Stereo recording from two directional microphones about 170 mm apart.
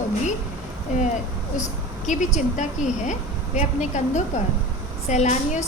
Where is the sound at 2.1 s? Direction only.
45° left (ahead or behind).